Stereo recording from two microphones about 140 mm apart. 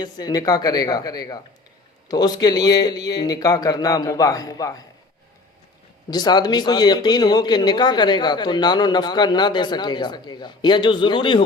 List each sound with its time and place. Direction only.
0.0 s speech: 30° left (ahead or behind)
6.1 s speech: 30° left (ahead or behind)